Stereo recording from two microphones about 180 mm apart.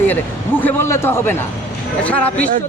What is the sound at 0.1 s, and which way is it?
A man's voice, 10° left (ahead or behind).